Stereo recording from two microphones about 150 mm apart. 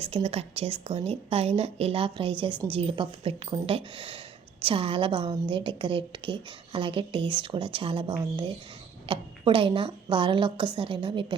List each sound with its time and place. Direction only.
0.0 s a woman's voice: 40° right (ahead or behind)